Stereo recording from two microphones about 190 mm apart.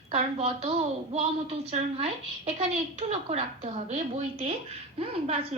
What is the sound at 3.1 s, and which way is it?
A woman's voice, 35° right (ahead or behind).